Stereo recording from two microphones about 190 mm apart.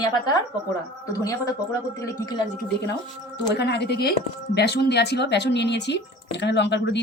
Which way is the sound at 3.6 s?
65° left (ahead or behind).